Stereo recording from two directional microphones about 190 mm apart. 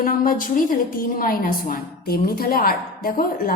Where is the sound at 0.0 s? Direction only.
45° left (ahead or behind).